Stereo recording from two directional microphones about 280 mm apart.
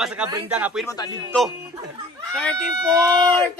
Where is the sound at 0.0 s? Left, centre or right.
Centre.